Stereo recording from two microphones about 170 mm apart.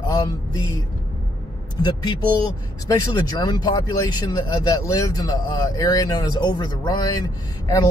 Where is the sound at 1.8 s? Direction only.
25° left (ahead or behind).